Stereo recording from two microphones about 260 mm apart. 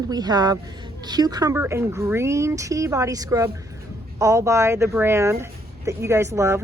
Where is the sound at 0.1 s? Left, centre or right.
Centre.